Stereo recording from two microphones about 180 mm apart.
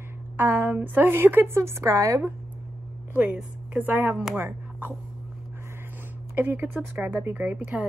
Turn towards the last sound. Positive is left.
turn(degrees=-10)  # may be behind; listen again after turning